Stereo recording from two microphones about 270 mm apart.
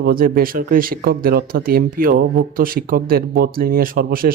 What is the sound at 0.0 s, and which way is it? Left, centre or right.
A man's voice, right.